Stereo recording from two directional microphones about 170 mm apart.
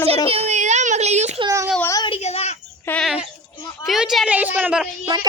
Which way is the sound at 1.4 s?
20° right (ahead or behind).